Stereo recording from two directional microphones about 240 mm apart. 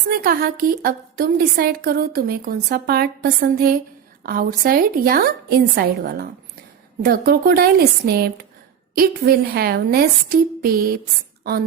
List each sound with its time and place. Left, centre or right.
0.1 s a woman's voice: right